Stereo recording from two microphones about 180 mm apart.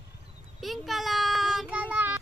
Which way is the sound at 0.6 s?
Centre (ahead or behind).